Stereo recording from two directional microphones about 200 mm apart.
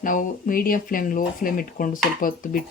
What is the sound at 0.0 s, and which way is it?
Speech, 40° left (ahead or behind).